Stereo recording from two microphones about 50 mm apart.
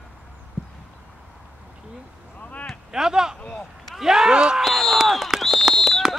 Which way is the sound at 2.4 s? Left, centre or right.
Left.